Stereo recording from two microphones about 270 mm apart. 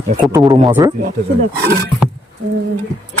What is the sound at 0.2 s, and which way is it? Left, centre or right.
Speech, centre.